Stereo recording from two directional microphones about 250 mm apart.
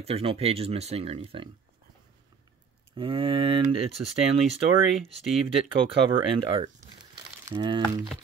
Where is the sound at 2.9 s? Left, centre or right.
Right.